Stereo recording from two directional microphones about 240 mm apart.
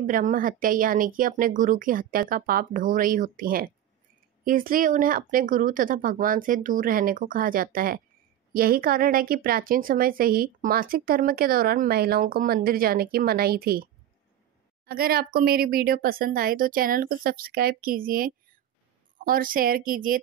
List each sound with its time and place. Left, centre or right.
0.0 s a woman's voice: right
14.9 s a woman's voice: right